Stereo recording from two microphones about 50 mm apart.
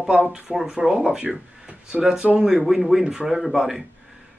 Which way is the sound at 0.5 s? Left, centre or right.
Centre.